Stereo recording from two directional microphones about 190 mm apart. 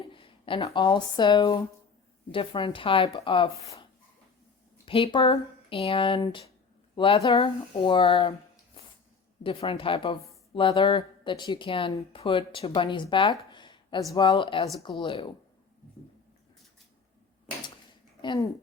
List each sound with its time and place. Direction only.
0.1 s speech: 25° left (ahead or behind)
4.9 s a woman's voice: 30° left (ahead or behind)
13.5 s a sound: 25° left (ahead or behind)
14.1 s speech: 25° left (ahead or behind)
18.2 s speech: 25° left (ahead or behind)